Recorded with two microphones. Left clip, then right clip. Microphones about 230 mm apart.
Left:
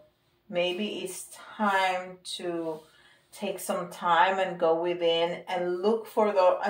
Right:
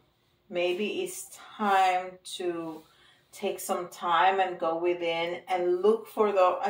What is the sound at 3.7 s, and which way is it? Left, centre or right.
Speech, left.